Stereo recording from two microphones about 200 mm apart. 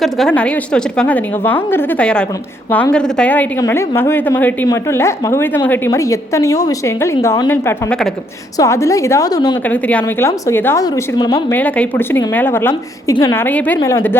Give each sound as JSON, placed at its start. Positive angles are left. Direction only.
{"t": 0.0, "sound": "a woman's voice", "side_deg": 0}
{"t": 8.5, "sound": "a woman's voice", "side_deg": 15}
{"t": 9.6, "sound": "a woman's voice", "side_deg": 5}
{"t": 11.5, "sound": "a woman's voice", "side_deg": 10}